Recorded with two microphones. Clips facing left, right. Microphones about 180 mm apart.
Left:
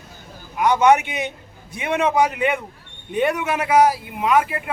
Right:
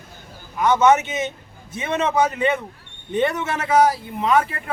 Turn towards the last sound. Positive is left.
turn(degrees=10)  # may be behind; listen again after turning